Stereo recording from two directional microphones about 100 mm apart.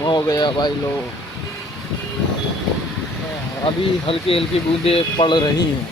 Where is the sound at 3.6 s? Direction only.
65° left (ahead or behind).